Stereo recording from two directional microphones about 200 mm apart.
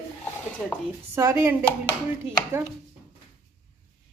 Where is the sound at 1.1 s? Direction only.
10° right (ahead or behind).